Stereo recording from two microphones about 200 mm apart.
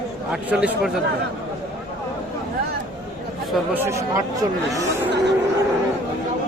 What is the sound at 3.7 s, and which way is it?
Speech, 15° right (ahead or behind).